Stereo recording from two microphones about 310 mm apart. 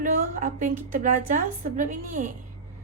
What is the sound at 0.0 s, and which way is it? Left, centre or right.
A woman's voice, right.